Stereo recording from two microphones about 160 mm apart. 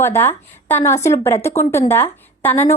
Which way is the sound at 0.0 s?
15° left (ahead or behind).